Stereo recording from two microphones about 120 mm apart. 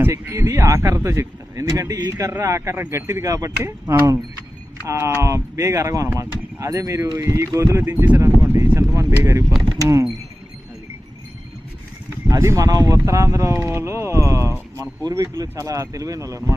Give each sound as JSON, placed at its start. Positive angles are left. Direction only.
{"t": 0.0, "sound": "speech", "side_deg": -20}
{"t": 8.2, "sound": "vehicle", "side_deg": -25}
{"t": 9.6, "sound": "speech", "side_deg": -30}
{"t": 12.3, "sound": "speech", "side_deg": -25}